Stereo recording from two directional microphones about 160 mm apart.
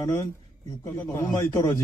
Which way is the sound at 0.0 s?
20° left (ahead or behind).